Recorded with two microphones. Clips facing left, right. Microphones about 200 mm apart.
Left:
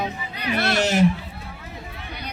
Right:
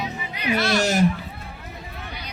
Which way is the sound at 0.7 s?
40° right (ahead or behind).